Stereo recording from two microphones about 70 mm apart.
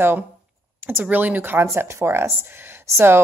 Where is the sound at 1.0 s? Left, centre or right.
Right.